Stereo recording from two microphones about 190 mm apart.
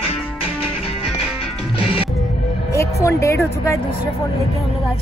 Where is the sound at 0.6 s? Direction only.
30° left (ahead or behind).